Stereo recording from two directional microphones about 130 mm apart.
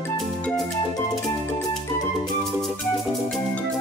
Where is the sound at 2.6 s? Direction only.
Centre (ahead or behind).